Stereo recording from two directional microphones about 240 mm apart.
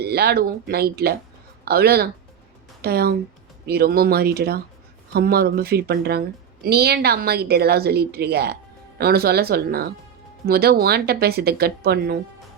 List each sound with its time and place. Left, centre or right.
0.0 s a woman's voice: right